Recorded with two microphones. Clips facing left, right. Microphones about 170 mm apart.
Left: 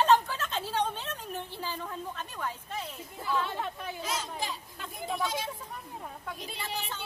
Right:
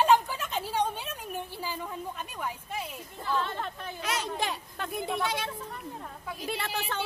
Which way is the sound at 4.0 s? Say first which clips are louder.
Right 6 dB; 65° right (ahead or behind).